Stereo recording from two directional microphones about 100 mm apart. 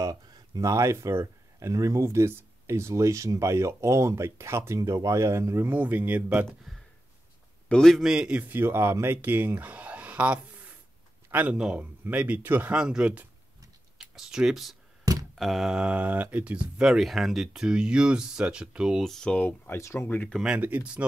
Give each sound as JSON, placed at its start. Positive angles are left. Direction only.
{"t": 0.0, "sound": "speech", "side_deg": -35}
{"t": 6.7, "sound": "a sound", "side_deg": 0}
{"t": 7.6, "sound": "a man's voice", "side_deg": 10}
{"t": 8.0, "sound": "a man's voice", "side_deg": -5}
{"t": 11.5, "sound": "speech", "side_deg": -10}
{"t": 12.7, "sound": "speech", "side_deg": -10}
{"t": 20.3, "sound": "speech", "side_deg": -10}